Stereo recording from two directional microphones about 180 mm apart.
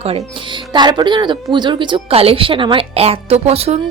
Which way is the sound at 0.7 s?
25° right (ahead or behind).